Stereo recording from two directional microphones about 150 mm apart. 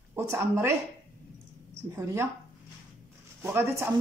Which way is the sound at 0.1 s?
15° right (ahead or behind).